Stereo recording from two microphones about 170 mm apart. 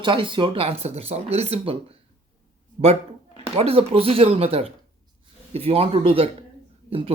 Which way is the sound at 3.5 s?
35° right (ahead or behind).